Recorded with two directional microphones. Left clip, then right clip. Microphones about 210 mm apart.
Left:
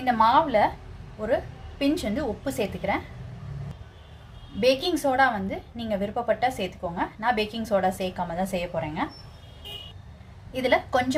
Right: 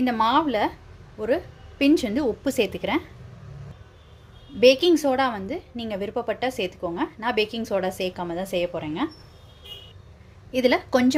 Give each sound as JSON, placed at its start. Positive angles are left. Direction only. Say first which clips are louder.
{"t": 0.0, "sound": "speech", "louder": "left 1 dB", "side_deg": -45}
{"t": 1.8, "sound": "a woman's voice", "louder": "right 5 dB", "side_deg": -40}
{"t": 4.6, "sound": "a woman's voice", "louder": "right 6 dB", "side_deg": -40}
{"t": 10.5, "sound": "speech", "louder": "right 2 dB", "side_deg": -40}